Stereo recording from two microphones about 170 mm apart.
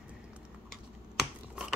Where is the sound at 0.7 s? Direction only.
Centre (ahead or behind).